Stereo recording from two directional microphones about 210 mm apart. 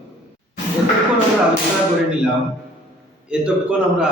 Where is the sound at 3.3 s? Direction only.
5° right (ahead or behind).